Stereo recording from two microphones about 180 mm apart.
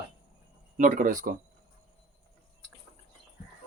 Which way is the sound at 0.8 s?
45° right (ahead or behind).